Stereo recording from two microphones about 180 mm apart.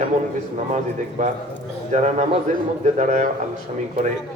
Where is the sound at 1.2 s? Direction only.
45° right (ahead or behind).